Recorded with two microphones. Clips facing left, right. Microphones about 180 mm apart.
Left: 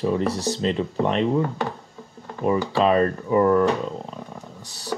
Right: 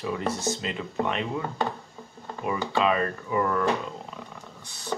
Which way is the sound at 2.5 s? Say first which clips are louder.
Left 5 dB; 35° left (ahead or behind).